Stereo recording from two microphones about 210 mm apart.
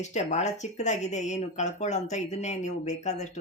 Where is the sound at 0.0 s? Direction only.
35° left (ahead or behind).